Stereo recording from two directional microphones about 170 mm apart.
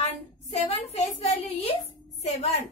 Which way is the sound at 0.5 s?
40° left (ahead or behind).